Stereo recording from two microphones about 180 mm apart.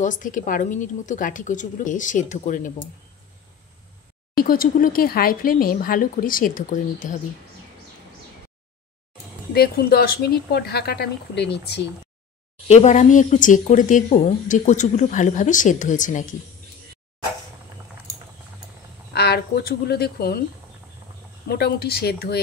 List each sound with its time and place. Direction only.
0.0 s speech: 45° left (ahead or behind)
4.4 s speech: 50° left (ahead or behind)
9.5 s speech: 60° left (ahead or behind)
12.6 s speech: 40° left (ahead or behind)
19.1 s speech: 65° left (ahead or behind)
21.5 s speech: 60° left (ahead or behind)